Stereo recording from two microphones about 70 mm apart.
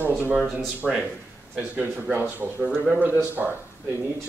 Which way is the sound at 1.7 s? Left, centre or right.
Right.